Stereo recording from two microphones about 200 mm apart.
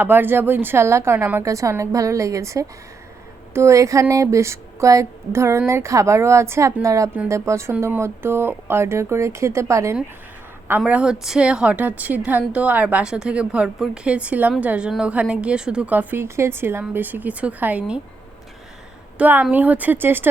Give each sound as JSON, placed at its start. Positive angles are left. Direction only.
{"t": 0.0, "sound": "a woman's voice", "side_deg": -10}
{"t": 19.2, "sound": "a woman's voice", "side_deg": -10}